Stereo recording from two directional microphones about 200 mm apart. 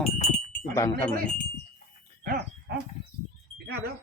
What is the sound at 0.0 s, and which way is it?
Speech, 35° left (ahead or behind).